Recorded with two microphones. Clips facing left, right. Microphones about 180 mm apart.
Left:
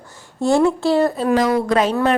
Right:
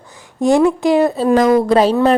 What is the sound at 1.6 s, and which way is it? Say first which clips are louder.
Speech: right 5 dB; 35° right (ahead or behind).